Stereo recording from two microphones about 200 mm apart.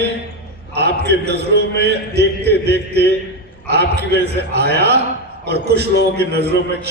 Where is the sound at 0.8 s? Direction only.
55° right (ahead or behind).